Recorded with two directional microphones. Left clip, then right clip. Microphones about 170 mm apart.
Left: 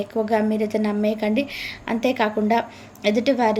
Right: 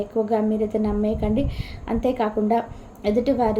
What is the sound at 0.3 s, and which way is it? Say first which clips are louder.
A woman's voice: left 1 dB; 20° left (ahead or behind).